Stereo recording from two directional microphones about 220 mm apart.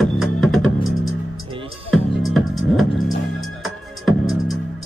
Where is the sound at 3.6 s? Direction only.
Centre (ahead or behind).